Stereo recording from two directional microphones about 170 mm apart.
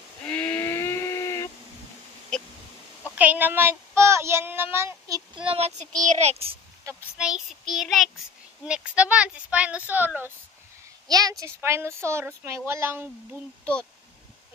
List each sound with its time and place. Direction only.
0.3 s steam whistle: 10° left (ahead or behind)
3.2 s speech: 10° right (ahead or behind)
5.4 s child singing: 35° right (ahead or behind)
5.8 s a child's voice: 45° right (ahead or behind)
6.8 s a sound: 15° right (ahead or behind)
7.2 s child singing: 5° right (ahead or behind)
8.6 s speech: 5° right (ahead or behind)
11.1 s speech: 20° right (ahead or behind)